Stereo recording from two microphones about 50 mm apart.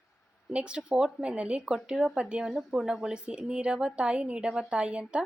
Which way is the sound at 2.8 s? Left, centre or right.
Centre.